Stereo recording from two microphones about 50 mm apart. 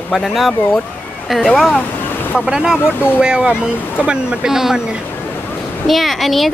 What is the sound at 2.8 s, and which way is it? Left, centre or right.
Speech, left.